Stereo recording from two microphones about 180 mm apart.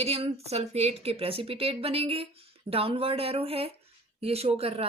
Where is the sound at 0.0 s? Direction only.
35° right (ahead or behind).